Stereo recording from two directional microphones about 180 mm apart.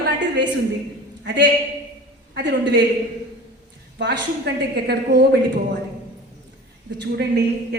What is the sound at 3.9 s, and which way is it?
Speech, 75° right (ahead or behind).